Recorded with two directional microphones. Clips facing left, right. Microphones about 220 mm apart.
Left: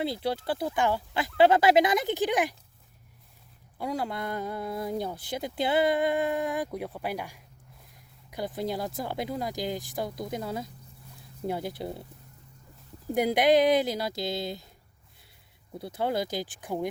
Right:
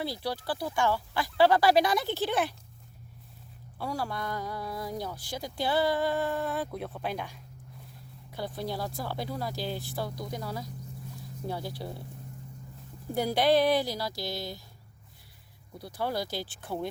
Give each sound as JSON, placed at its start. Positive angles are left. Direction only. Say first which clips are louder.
{"t": 0.0, "sound": "speech", "louder": "left 4 dB", "side_deg": 20}
{"t": 3.8, "sound": "speech", "louder": "left 2 dB", "side_deg": 20}
{"t": 13.1, "sound": "speech", "louder": "left 3 dB", "side_deg": 20}
{"t": 15.8, "sound": "speech", "louder": "left 3 dB", "side_deg": 20}